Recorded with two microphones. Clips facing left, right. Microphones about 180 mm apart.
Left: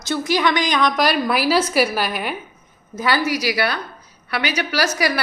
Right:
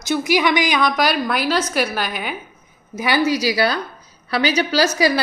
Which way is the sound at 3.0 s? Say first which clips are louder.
Right 2 dB; 15° right (ahead or behind).